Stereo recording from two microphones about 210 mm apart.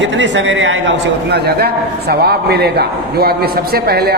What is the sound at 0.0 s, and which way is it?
A man's voice, 60° right (ahead or behind).